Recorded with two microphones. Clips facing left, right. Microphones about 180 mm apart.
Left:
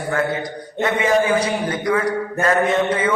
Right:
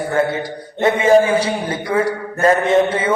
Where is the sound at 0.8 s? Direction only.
30° right (ahead or behind).